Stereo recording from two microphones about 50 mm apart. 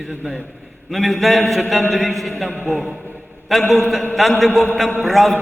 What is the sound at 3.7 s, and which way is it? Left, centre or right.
A man's voice, centre.